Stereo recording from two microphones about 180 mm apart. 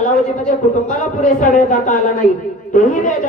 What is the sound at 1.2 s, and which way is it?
A woman's voice, 45° left (ahead or behind).